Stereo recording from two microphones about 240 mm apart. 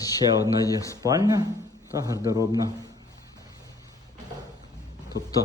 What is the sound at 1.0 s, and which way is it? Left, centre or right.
A man's voice, centre.